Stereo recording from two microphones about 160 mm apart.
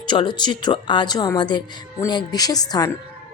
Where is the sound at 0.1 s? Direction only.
30° left (ahead or behind).